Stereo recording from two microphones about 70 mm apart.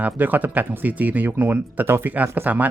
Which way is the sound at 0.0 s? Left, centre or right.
Right.